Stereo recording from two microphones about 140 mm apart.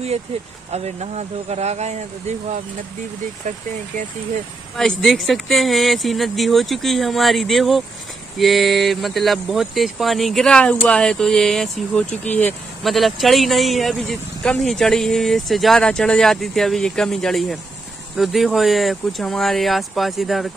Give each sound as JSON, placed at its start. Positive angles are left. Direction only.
{"t": 0.7, "sound": "speech", "side_deg": -50}
{"t": 4.7, "sound": "speech", "side_deg": 0}